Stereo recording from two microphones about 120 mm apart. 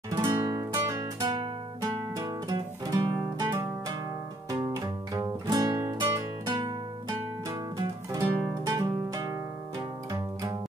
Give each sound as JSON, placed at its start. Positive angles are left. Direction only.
{"t": 0.2, "sound": "music", "side_deg": -25}
{"t": 1.2, "sound": "guitar", "side_deg": -45}
{"t": 1.8, "sound": "music", "side_deg": -30}